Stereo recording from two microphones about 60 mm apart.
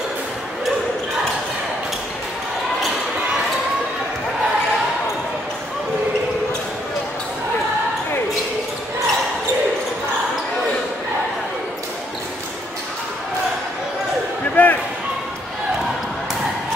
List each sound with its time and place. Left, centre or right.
14.5 s basketball bounce: left